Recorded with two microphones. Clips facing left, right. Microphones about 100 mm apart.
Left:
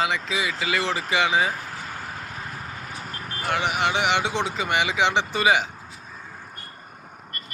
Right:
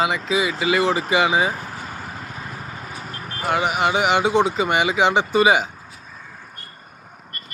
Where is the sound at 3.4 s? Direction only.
20° right (ahead or behind).